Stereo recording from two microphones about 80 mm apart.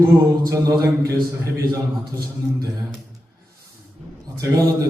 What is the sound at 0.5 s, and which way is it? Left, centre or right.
Speech, right.